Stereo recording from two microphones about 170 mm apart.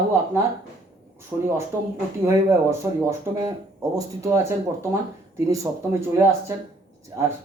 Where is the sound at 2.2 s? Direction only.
15° right (ahead or behind).